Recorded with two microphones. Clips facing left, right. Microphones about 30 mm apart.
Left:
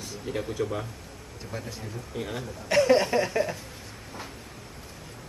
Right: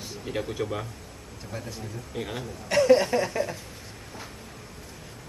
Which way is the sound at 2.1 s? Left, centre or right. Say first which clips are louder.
Even; centre.